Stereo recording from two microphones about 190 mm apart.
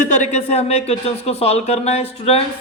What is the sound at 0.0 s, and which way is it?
Speech, 40° left (ahead or behind).